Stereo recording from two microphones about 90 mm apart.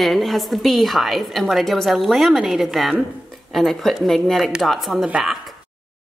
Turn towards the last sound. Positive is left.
turn(degrees=-5)  # may be behind; listen again after turning